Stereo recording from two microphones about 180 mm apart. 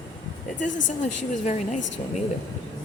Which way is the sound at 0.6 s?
45° left (ahead or behind).